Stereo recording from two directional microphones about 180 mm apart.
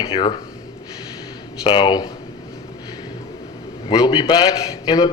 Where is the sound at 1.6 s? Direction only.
25° left (ahead or behind).